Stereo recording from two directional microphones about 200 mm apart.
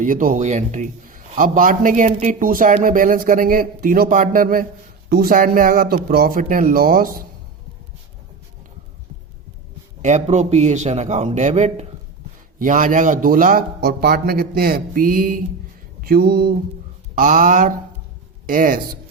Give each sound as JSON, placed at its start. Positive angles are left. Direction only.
{"t": 0.0, "sound": "a man's voice", "side_deg": -40}
{"t": 10.0, "sound": "a man's voice", "side_deg": -35}